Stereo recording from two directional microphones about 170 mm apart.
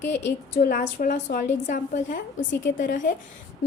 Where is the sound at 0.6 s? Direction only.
50° left (ahead or behind).